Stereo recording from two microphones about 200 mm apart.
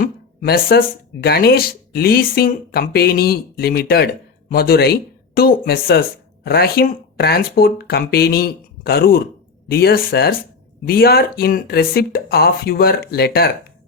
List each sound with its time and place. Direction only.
0.0 s speech: 50° left (ahead or behind)